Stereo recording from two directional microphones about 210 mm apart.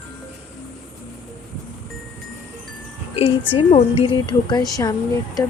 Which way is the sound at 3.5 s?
25° left (ahead or behind).